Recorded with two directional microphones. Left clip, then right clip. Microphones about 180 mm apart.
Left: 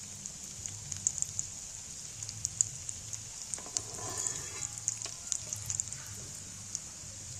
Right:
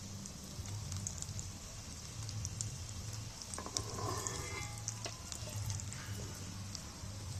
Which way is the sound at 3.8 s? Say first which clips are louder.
Left 1 dB; 15° left (ahead or behind).